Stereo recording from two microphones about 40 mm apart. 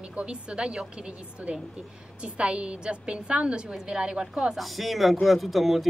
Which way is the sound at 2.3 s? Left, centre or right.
Right.